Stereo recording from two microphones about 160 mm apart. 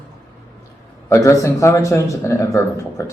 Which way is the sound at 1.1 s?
20° left (ahead or behind).